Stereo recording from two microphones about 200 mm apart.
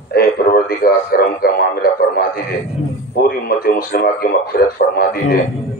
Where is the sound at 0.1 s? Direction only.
50° left (ahead or behind).